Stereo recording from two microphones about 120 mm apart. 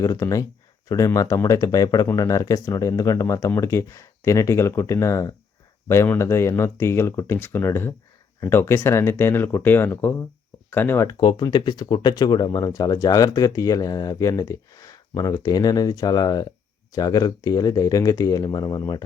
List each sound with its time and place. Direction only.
0.0 s speech: 30° left (ahead or behind)
11.2 s speech: 40° left (ahead or behind)